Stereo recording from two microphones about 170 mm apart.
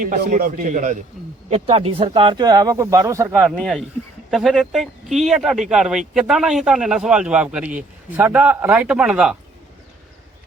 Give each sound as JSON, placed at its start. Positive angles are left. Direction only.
{"t": 0.0, "sound": "speech", "side_deg": -50}
{"t": 1.5, "sound": "speech", "side_deg": -40}
{"t": 3.5, "sound": "speech", "side_deg": 5}